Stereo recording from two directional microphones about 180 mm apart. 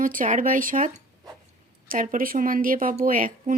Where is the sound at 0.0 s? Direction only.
45° right (ahead or behind).